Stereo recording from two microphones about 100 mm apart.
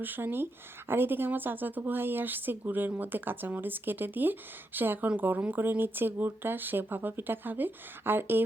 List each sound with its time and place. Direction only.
0.0 s speech: 20° right (ahead or behind)